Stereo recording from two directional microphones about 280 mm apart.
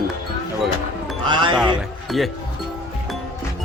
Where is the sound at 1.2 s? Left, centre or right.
Centre.